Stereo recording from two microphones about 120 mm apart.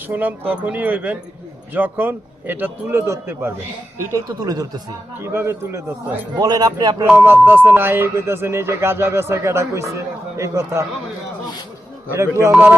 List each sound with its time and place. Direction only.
0.1 s a man's voice: 15° right (ahead or behind); by 4.8 s 30° right (ahead or behind)
5.2 s speech: 20° right (ahead or behind)
6.3 s speech: 35° right (ahead or behind)
7.2 s speech: 15° right (ahead or behind)
12.1 s speech: 20° right (ahead or behind)